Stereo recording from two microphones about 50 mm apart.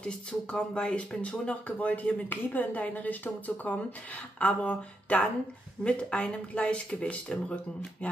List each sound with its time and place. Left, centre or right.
0.0 s speech: centre